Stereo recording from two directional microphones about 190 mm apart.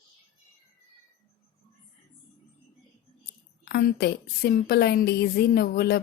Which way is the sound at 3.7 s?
55° left (ahead or behind).